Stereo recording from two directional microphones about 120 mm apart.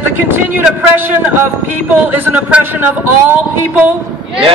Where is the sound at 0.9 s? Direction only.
15° right (ahead or behind).